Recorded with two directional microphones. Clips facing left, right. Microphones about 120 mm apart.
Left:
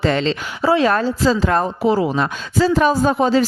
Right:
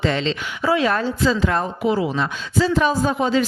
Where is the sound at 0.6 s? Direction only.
30° left (ahead or behind).